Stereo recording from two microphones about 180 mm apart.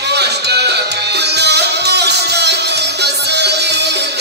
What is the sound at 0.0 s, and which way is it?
Music, 70° right (ahead or behind).